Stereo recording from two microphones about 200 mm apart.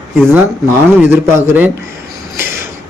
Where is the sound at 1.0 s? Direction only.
10° right (ahead or behind).